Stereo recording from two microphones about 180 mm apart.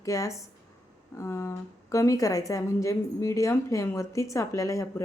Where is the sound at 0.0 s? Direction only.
15° left (ahead or behind).